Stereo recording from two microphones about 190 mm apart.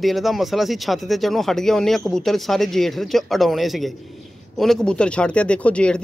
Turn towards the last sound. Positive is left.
turn(degrees=5)  # may be behind; listen again after turning